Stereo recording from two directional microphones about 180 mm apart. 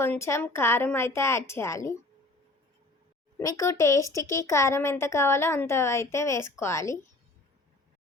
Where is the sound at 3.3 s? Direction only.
15° left (ahead or behind).